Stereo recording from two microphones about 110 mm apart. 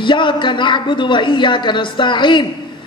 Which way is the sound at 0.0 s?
45° left (ahead or behind).